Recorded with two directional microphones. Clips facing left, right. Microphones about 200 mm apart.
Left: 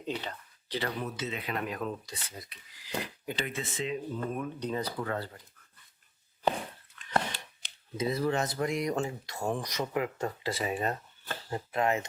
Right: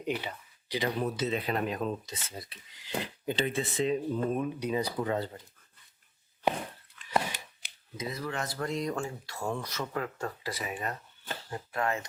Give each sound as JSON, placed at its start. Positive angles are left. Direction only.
{"t": 0.0, "sound": "speech", "side_deg": -10}
{"t": 1.0, "sound": "speech", "side_deg": -35}
{"t": 1.7, "sound": "speech", "side_deg": -25}
{"t": 4.4, "sound": "speech", "side_deg": -10}
{"t": 7.1, "sound": "a sound", "side_deg": -10}
{"t": 7.9, "sound": "speech", "side_deg": 30}